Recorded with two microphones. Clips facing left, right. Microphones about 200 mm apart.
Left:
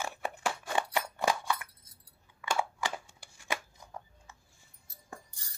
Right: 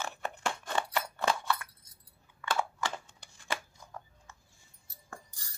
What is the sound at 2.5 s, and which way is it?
Shuffling cards, 10° left (ahead or behind).